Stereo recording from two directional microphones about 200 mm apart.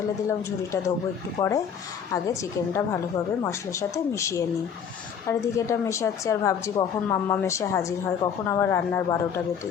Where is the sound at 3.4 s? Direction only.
15° left (ahead or behind).